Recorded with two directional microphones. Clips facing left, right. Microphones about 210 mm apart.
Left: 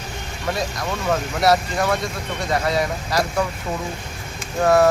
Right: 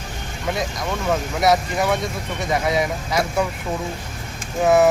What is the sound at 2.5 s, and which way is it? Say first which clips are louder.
Speech: right 1 dB; 20° right (ahead or behind).